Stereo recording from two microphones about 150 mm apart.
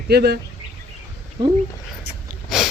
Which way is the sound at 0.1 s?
90° right.